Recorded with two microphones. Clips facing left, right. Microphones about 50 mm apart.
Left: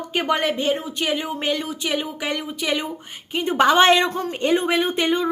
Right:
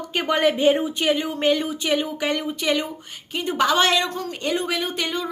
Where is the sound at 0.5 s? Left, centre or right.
Centre.